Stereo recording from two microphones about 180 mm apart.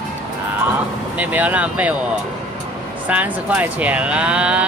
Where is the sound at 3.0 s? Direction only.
10° right (ahead or behind).